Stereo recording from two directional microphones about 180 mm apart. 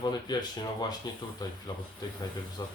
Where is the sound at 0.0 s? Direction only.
25° left (ahead or behind).